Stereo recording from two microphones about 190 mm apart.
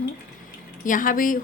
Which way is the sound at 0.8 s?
45° left (ahead or behind).